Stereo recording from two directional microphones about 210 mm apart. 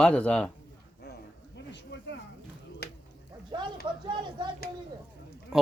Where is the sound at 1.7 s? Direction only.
55° left (ahead or behind).